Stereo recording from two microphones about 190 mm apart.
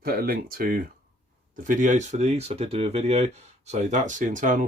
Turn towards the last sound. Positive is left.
turn(degrees=-45)  # may be behind; listen again after turning